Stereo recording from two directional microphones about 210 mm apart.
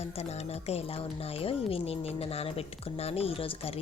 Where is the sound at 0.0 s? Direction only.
30° left (ahead or behind).